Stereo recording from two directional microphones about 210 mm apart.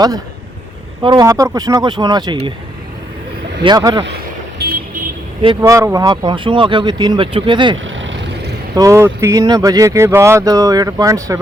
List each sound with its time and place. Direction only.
1.0 s speech: 20° right (ahead or behind)
3.6 s speech: 20° right (ahead or behind)
4.6 s vehicle: 50° right (ahead or behind)
5.6 s speech: 15° right (ahead or behind)
7.9 s vehicle: 60° right (ahead or behind)
8.7 s speech: 15° right (ahead or behind)